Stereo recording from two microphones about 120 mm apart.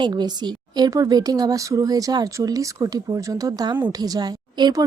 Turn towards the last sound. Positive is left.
turn(degrees=-35)  # may be behind; listen again after turning